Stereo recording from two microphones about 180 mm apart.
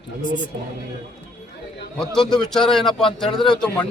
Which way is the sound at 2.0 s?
5° left (ahead or behind).